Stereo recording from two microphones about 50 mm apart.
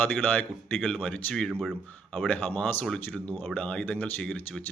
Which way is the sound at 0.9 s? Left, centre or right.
Left.